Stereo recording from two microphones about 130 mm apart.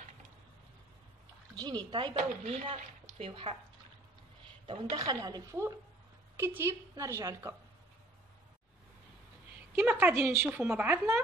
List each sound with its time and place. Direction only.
1.5 s speech: 30° right (ahead or behind)
2.4 s speech: 50° right (ahead or behind)
4.9 s a woman's voice: 30° right (ahead or behind)
9.8 s a woman's voice: 15° right (ahead or behind)